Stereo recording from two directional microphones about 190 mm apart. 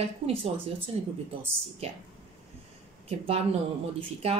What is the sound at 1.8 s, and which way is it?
Speech, 35° right (ahead or behind).